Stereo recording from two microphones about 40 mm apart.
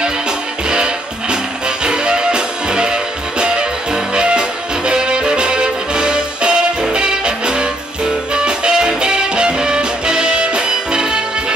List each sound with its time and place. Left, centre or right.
0.7 s music: right